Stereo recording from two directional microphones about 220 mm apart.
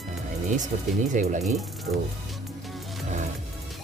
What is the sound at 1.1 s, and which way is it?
Speech, 35° right (ahead or behind).